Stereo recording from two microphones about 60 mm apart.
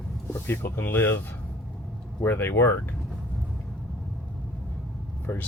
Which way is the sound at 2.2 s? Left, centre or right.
Left.